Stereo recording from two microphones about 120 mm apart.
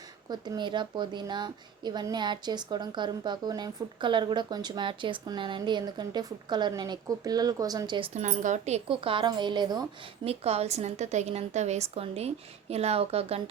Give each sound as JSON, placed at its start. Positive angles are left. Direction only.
{"t": 0.3, "sound": "a woman's voice", "side_deg": -35}
{"t": 8.1, "sound": "speech", "side_deg": -90}
{"t": 8.9, "sound": "a woman's voice", "side_deg": -45}
{"t": 10.2, "sound": "a woman's voice", "side_deg": -60}